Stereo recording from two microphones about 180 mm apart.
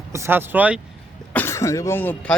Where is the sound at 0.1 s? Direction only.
15° right (ahead or behind).